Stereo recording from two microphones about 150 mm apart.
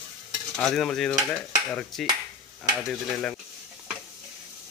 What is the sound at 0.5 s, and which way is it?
Stir, centre (ahead or behind).